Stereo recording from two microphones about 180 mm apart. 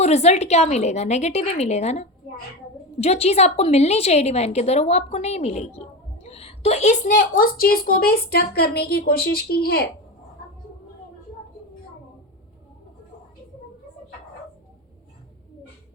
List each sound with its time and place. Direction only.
0.0 s a woman's voice: 35° left (ahead or behind); by 9.9 s 60° left (ahead or behind)